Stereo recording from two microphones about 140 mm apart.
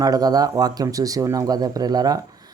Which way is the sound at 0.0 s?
25° right (ahead or behind).